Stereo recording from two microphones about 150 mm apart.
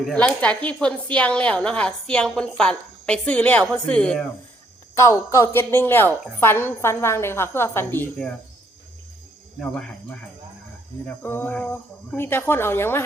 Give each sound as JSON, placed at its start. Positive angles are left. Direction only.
{"t": 0.0, "sound": "a woman's voice", "side_deg": 5}
{"t": 4.9, "sound": "a woman's voice", "side_deg": 20}
{"t": 9.6, "sound": "cricket", "side_deg": 5}
{"t": 11.0, "sound": "a woman's voice", "side_deg": 10}